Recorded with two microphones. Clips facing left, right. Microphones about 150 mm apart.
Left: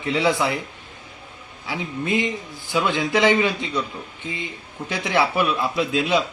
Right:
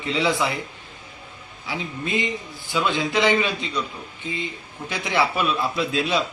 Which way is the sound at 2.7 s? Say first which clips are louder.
Left 2 dB; 15° left (ahead or behind).